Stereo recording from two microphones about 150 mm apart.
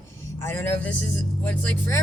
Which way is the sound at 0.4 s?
15° left (ahead or behind).